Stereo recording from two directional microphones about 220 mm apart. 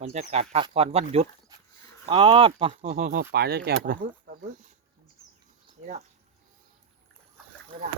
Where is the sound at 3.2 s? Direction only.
50° right (ahead or behind).